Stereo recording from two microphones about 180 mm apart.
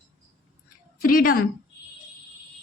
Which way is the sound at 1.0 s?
50° left (ahead or behind).